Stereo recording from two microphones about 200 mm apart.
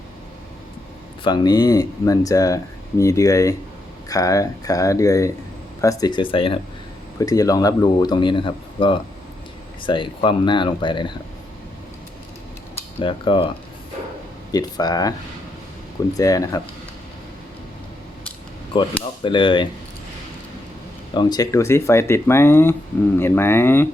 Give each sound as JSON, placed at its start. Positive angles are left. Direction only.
{"t": 1.2, "sound": "speech", "side_deg": 20}
{"t": 12.7, "sound": "cutlery", "side_deg": 30}
{"t": 14.5, "sound": "speech", "side_deg": 20}
{"t": 16.1, "sound": "speech", "side_deg": 15}
{"t": 18.7, "sound": "speech", "side_deg": 25}
{"t": 21.1, "sound": "speech", "side_deg": 20}